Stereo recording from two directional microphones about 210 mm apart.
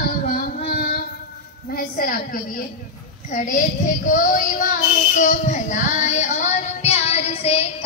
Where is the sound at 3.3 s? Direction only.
40° left (ahead or behind).